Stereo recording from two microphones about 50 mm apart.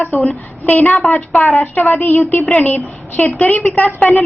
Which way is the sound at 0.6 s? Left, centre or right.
Left.